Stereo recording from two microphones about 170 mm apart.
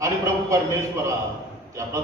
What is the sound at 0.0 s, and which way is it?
A man's voice, 20° right (ahead or behind).